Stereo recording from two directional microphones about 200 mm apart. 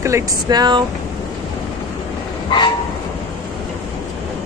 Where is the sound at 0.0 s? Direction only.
15° right (ahead or behind).